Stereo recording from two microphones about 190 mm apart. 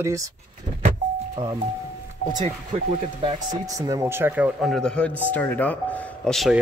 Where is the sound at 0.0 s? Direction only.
15° right (ahead or behind).